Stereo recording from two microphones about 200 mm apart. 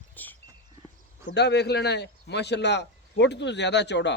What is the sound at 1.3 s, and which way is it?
A man's voice, 55° left (ahead or behind).